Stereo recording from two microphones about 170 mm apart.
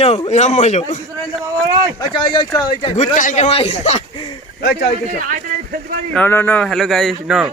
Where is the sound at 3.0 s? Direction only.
45° left (ahead or behind).